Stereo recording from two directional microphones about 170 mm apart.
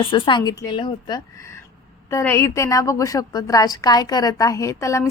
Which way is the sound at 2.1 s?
15° left (ahead or behind).